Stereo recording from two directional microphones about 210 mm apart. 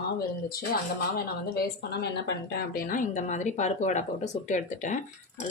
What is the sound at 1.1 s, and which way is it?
A woman's voice, 50° left (ahead or behind).